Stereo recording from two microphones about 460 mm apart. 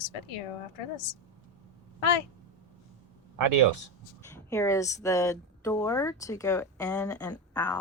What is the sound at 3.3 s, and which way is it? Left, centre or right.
Speech, right.